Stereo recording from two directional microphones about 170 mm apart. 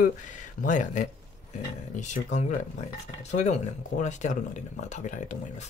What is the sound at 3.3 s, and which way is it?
Speech, 45° left (ahead or behind).